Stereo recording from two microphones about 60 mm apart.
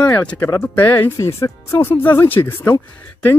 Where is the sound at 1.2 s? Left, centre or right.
Left.